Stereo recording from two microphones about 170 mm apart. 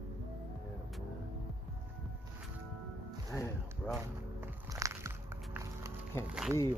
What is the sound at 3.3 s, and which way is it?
Music, 15° left (ahead or behind).